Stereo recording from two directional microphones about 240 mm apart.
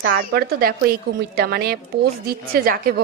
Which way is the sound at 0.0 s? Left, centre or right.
Right.